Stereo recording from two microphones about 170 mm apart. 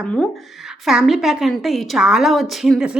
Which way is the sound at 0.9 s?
Centre (ahead or behind).